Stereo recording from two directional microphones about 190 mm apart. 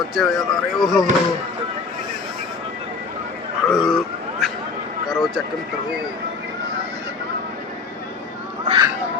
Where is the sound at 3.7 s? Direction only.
5° right (ahead or behind).